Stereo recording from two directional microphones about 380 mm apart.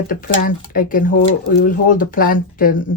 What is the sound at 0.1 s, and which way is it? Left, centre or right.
Speech, left.